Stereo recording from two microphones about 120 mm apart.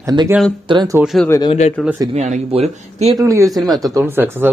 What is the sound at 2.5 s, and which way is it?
Speech, 65° right (ahead or behind).